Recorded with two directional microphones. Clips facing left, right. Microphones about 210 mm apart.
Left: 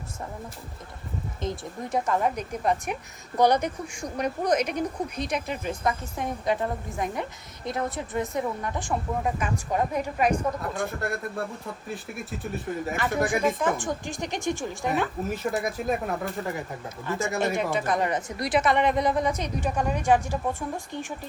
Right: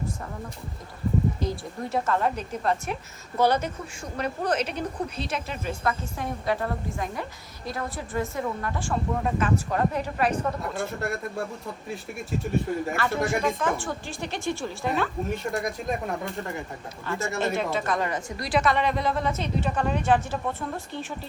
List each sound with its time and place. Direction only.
1.4 s a woman's voice: 20° left (ahead or behind)
11.0 s speech: centre (ahead or behind)
13.7 s a woman's voice: 15° left (ahead or behind)
15.3 s speech: centre (ahead or behind)
17.2 s a woman's voice: 15° left (ahead or behind)